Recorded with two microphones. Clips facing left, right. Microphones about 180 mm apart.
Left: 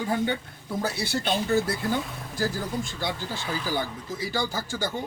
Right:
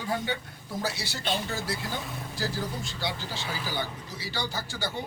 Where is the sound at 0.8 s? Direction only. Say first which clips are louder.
Left 5 dB; 55° left (ahead or behind).